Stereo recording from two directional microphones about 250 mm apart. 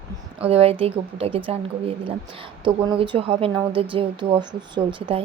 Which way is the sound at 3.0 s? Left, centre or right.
Right.